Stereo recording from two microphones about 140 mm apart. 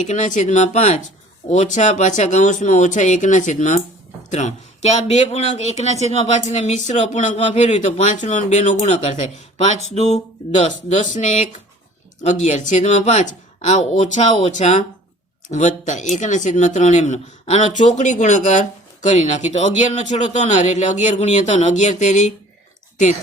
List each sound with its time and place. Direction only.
0.0 s speech: 60° left (ahead or behind)